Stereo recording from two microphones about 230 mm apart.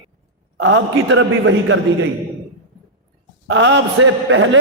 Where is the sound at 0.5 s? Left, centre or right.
Right.